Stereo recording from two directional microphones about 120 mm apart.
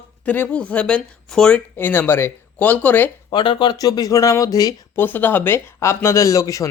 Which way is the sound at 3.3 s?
40° left (ahead or behind).